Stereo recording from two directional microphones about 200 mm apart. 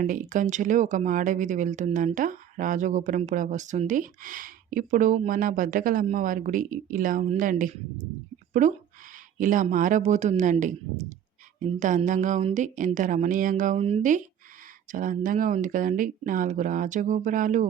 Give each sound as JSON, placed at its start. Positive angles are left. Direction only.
{"t": 0.0, "sound": "speech", "side_deg": -40}
{"t": 9.1, "sound": "speech", "side_deg": -40}
{"t": 11.8, "sound": "speech", "side_deg": -40}